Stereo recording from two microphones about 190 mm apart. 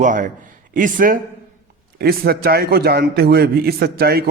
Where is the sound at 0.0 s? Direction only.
45° right (ahead or behind).